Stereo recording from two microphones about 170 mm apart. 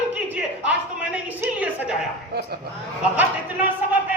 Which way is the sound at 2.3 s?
65° right (ahead or behind).